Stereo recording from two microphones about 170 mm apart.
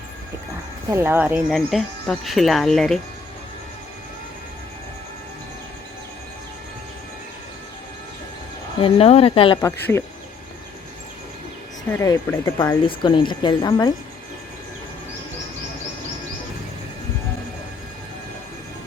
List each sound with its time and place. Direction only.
0.9 s speech: 15° right (ahead or behind); by 3.0 s centre (ahead or behind)
8.8 s speech: 35° left (ahead or behind)
9.6 s speech: 15° left (ahead or behind)
11.9 s speech: 15° left (ahead or behind)
12.8 s speech: 30° left (ahead or behind)